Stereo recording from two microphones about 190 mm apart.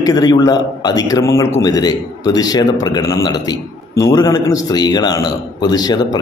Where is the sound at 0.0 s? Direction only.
20° left (ahead or behind).